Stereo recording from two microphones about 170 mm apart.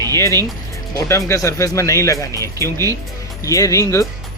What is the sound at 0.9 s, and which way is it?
Speech, 15° left (ahead or behind).